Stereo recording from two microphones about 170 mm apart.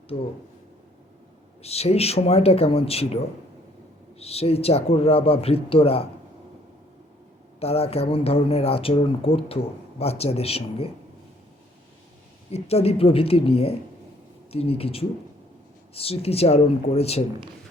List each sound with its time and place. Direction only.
0.1 s speech: 30° left (ahead or behind)
1.6 s speech: 35° left (ahead or behind)
4.2 s speech: 35° left (ahead or behind)
7.6 s speech: 35° left (ahead or behind)
12.5 s speech: 35° left (ahead or behind)